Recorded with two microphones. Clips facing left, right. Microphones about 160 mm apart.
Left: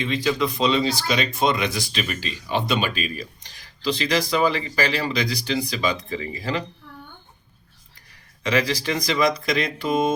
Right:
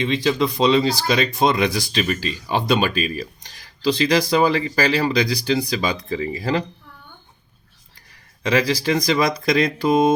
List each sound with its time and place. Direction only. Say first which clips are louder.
0.1 s speech: right 3 dB; 30° right (ahead or behind)
8.5 s speech: right 4 dB; 35° right (ahead or behind)